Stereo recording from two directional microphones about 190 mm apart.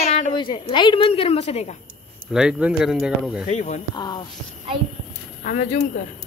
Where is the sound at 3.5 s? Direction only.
40° left (ahead or behind).